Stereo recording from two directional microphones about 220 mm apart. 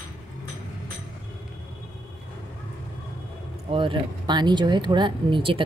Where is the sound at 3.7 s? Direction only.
25° right (ahead or behind).